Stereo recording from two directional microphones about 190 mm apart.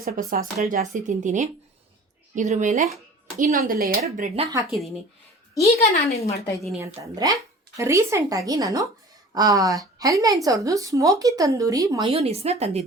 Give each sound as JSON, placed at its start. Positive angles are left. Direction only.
{"t": 0.0, "sound": "speech", "side_deg": -50}
{"t": 4.0, "sound": "speech", "side_deg": -35}
{"t": 6.1, "sound": "a woman's voice", "side_deg": 35}
{"t": 6.7, "sound": "a woman's voice", "side_deg": -15}